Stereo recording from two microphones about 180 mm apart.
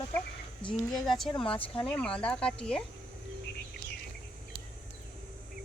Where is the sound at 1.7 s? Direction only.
5° left (ahead or behind).